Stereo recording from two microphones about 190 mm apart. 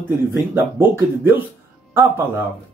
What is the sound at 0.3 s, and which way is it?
Speech, 10° right (ahead or behind).